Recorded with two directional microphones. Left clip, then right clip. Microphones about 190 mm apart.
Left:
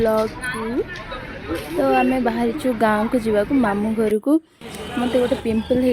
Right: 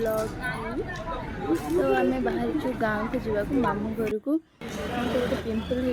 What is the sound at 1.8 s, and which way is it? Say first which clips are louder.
A woman's voice: left 8 dB; 50° left (ahead or behind).